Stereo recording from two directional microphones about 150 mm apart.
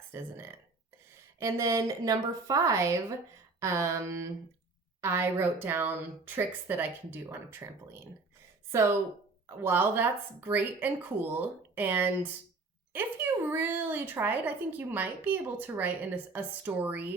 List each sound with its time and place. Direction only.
0.1 s a woman's voice: 15° right (ahead or behind)
9.5 s speech: 15° right (ahead or behind)